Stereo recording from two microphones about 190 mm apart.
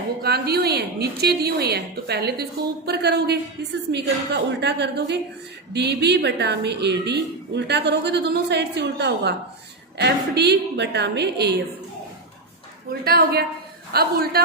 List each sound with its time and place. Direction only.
0.2 s a woman's voice: 55° right (ahead or behind)
12.9 s a woman's voice: 55° right (ahead or behind)